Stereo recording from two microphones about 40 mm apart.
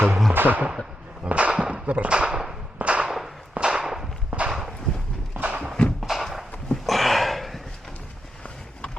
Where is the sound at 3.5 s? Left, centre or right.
Right.